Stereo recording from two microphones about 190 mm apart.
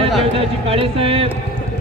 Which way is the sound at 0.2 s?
30° right (ahead or behind).